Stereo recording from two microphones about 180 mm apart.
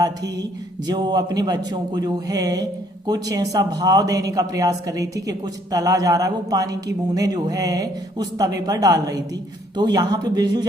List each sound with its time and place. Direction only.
0.9 s a woman's voice: 25° right (ahead or behind)